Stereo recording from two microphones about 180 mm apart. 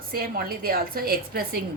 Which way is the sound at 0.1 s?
55° right (ahead or behind).